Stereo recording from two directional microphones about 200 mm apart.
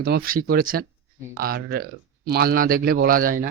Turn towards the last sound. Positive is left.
turn(degrees=-45)  # may be behind; listen again after turning